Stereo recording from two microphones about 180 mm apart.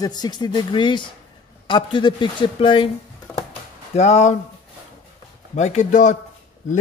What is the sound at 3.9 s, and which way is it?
Speech, 40° left (ahead or behind).